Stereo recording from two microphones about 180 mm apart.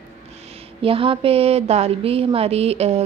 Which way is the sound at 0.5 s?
30° right (ahead or behind).